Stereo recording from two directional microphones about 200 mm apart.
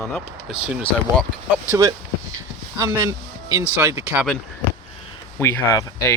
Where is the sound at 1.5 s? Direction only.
15° right (ahead or behind).